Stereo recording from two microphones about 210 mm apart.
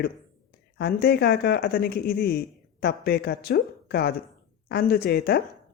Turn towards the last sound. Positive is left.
turn(degrees=50)  # may be behind; listen again after turning